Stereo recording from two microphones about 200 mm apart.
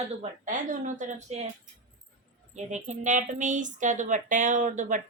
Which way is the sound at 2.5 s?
35° right (ahead or behind).